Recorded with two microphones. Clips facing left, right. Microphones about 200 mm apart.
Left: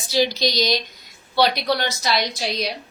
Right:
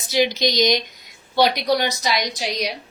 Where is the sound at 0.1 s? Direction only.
20° right (ahead or behind).